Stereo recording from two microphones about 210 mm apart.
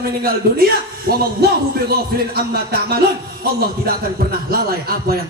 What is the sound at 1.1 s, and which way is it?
A man's voice, 45° right (ahead or behind).